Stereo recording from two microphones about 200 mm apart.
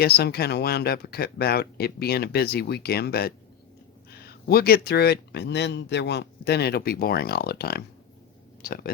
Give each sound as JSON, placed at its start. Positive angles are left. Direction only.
{"t": 0.0, "sound": "speech", "side_deg": 50}